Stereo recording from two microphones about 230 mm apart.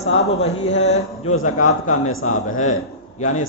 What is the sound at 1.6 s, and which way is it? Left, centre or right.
Speech, left.